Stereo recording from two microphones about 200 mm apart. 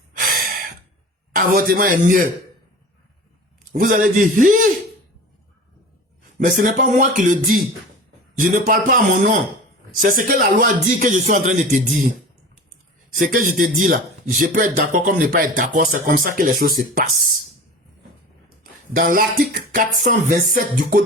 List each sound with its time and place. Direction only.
0.2 s gasp: 45° right (ahead or behind)
1.3 s speech: 45° right (ahead or behind)
3.7 s a man's voice: 45° right (ahead or behind)
6.4 s a man's voice: 45° right (ahead or behind)
13.1 s speech: 45° right (ahead or behind)
18.6 s speech: 45° right (ahead or behind)